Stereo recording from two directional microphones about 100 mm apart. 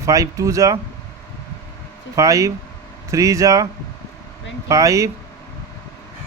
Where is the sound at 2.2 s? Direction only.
30° right (ahead or behind).